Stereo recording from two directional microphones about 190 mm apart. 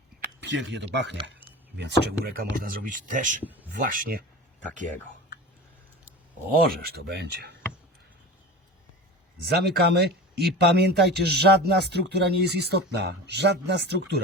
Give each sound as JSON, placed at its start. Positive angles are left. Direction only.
{"t": 0.3, "sound": "speech", "side_deg": -65}
{"t": 3.4, "sound": "speech", "side_deg": -10}
{"t": 3.7, "sound": "speech", "side_deg": -45}
{"t": 6.7, "sound": "speech", "side_deg": -55}
{"t": 9.5, "sound": "speech", "side_deg": -60}